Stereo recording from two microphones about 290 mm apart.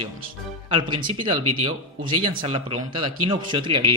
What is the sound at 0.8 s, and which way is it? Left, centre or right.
A man's voice, centre.